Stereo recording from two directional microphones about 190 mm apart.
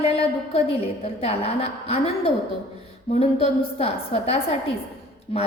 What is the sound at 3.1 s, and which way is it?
A woman's voice, 30° left (ahead or behind).